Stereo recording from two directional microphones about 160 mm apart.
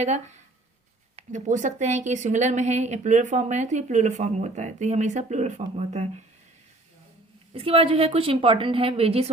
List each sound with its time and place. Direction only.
0.0 s a woman's voice: 45° right (ahead or behind)
7.5 s a woman's voice: 35° right (ahead or behind)